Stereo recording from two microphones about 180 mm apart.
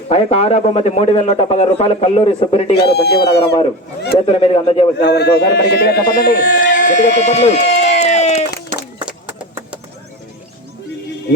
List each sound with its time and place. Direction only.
0.1 s a man's voice: 35° left (ahead or behind)
2.7 s speech: 65° left (ahead or behind)
4.3 s a man's voice: 30° left (ahead or behind)
4.9 s speech: 65° left (ahead or behind); by 8.4 s 35° left (ahead or behind)